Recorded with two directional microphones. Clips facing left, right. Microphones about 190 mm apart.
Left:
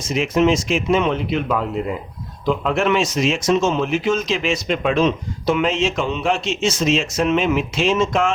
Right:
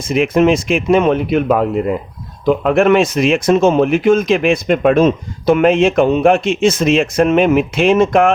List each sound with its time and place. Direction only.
0.0 s speech: 55° right (ahead or behind)